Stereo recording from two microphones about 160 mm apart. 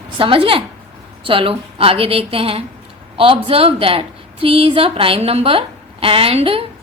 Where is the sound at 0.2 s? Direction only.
35° right (ahead or behind).